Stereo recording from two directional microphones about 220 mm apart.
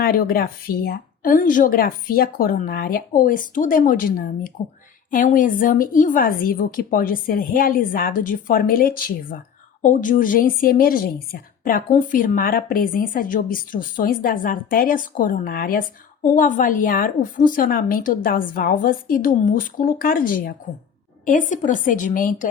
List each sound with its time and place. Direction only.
0.0 s a woman's voice: 40° left (ahead or behind)